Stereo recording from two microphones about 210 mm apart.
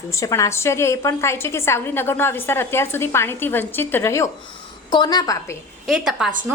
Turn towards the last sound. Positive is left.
turn(degrees=0)  # may be behind; listen again after turning